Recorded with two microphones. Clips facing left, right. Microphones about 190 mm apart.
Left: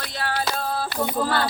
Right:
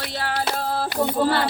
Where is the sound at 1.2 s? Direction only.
30° right (ahead or behind).